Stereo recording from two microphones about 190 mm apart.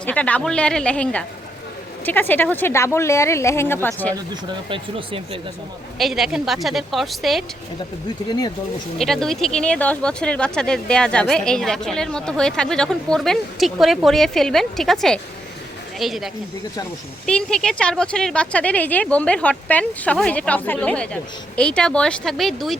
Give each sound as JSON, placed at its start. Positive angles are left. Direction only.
{"t": 0.0, "sound": "speech", "side_deg": 5}
{"t": 4.7, "sound": "speech", "side_deg": -30}
{"t": 6.0, "sound": "speech", "side_deg": 0}
{"t": 9.0, "sound": "speech", "side_deg": 0}
{"t": 16.0, "sound": "speech", "side_deg": 0}